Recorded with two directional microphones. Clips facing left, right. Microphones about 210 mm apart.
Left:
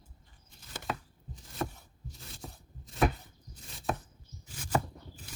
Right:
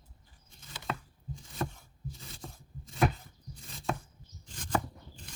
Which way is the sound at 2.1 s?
Centre (ahead or behind).